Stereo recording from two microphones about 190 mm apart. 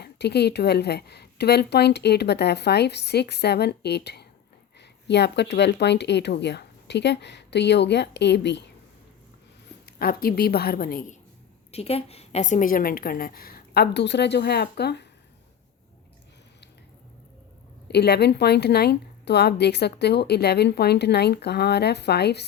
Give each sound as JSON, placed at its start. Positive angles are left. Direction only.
{"t": 0.0, "sound": "a woman's voice", "side_deg": 60}
{"t": 9.8, "sound": "a woman's voice", "side_deg": 50}
{"t": 11.7, "sound": "a woman's voice", "side_deg": 30}
{"t": 17.8, "sound": "a woman's voice", "side_deg": 60}